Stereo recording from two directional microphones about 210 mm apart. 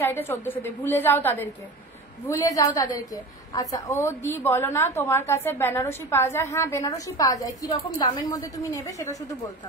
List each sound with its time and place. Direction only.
0.0 s a woman's voice: 10° left (ahead or behind)